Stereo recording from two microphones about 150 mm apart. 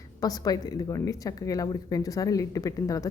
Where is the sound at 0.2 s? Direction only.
25° left (ahead or behind).